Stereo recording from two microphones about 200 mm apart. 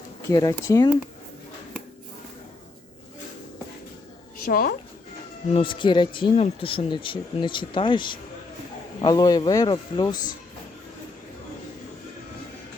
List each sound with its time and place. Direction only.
0.3 s speech: 20° left (ahead or behind)
4.4 s speech: 50° left (ahead or behind)
5.5 s speech: 25° left (ahead or behind)